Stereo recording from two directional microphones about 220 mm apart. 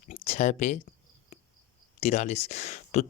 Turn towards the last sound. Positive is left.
turn(degrees=30)  # may be behind; listen again after turning